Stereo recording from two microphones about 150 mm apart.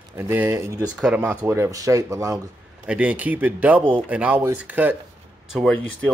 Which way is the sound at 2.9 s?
10° right (ahead or behind).